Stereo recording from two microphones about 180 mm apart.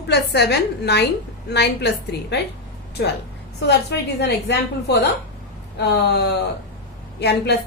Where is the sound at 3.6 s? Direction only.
70° left (ahead or behind).